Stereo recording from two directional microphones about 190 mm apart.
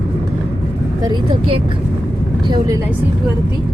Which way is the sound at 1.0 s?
25° right (ahead or behind).